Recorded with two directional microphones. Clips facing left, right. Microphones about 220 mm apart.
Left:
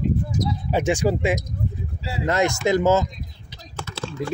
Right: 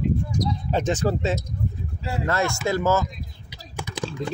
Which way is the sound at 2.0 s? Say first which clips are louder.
Right 2 dB; 50° right (ahead or behind).